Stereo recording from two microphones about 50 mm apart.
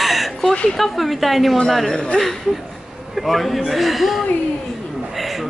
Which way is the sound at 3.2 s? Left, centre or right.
Centre.